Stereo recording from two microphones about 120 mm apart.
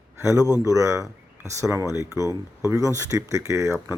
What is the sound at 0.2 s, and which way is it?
Speech, 25° right (ahead or behind).